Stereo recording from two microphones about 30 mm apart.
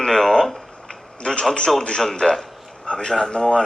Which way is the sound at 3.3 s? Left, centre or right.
Left.